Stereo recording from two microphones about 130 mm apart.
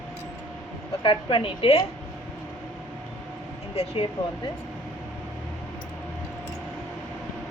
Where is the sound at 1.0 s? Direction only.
40° left (ahead or behind).